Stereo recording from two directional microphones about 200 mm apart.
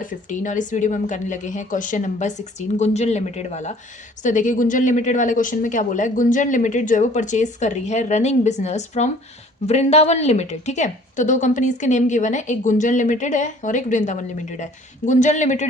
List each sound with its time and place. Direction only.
0.0 s a woman's voice: 40° left (ahead or behind)